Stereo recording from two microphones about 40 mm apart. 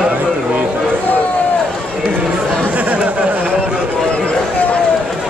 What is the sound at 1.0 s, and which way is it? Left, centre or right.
Run, left.